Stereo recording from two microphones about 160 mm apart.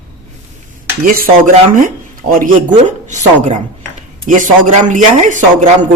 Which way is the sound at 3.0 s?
45° right (ahead or behind).